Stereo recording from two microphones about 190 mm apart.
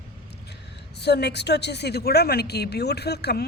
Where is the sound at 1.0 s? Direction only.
60° left (ahead or behind).